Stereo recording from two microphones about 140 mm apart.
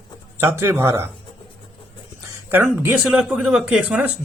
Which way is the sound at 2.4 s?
15° right (ahead or behind).